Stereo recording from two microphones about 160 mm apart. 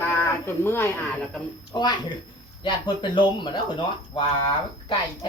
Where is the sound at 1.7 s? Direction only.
25° left (ahead or behind).